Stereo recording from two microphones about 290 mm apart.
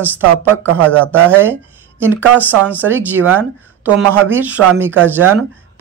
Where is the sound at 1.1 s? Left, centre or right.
Centre.